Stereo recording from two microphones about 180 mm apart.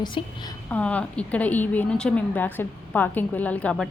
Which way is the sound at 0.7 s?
5° left (ahead or behind).